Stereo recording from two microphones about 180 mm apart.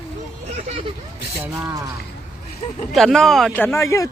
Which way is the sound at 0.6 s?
35° right (ahead or behind).